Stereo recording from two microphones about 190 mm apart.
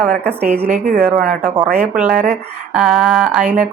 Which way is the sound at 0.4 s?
10° right (ahead or behind).